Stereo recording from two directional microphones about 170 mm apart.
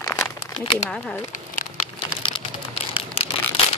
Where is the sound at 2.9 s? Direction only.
35° left (ahead or behind).